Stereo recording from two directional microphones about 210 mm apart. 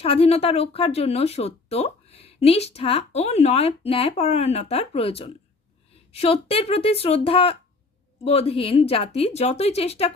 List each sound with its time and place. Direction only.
0.0 s speech: 30° left (ahead or behind)